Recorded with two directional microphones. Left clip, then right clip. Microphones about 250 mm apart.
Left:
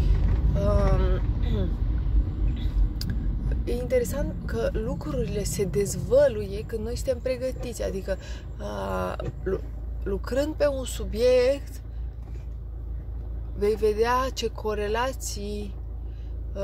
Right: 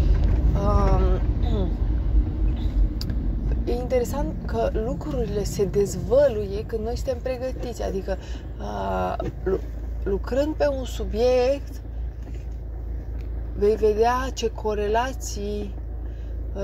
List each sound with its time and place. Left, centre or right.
0.0 s vehicle: centre
3.6 s speech: centre
13.6 s speech: centre